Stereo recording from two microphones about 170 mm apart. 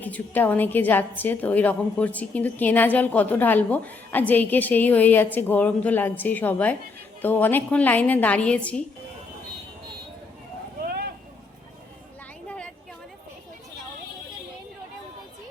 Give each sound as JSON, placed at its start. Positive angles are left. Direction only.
{"t": 0.0, "sound": "a woman's voice", "side_deg": 10}
{"t": 10.8, "sound": "vehicle", "side_deg": -65}
{"t": 12.5, "sound": "a sound", "side_deg": 5}